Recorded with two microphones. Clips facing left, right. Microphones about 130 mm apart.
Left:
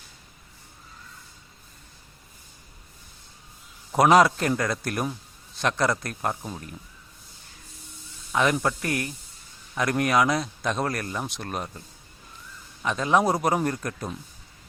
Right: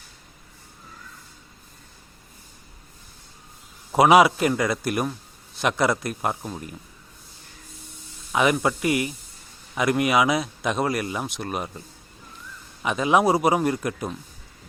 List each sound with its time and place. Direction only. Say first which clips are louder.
3.9 s a man's voice: right 2 dB; 5° right (ahead or behind)
8.3 s a man's voice: right 2 dB; 10° right (ahead or behind)
12.8 s speech: right 2 dB; 10° right (ahead or behind)